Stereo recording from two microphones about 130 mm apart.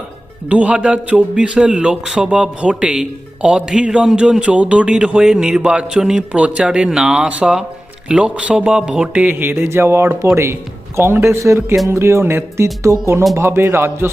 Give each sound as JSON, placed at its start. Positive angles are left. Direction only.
{"t": 0.4, "sound": "a man's voice", "side_deg": -10}